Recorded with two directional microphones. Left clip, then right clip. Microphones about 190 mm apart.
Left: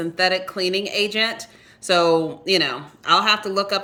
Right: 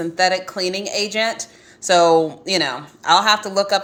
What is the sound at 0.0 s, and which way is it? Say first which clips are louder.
A woman's voice: right 2 dB; 10° left (ahead or behind).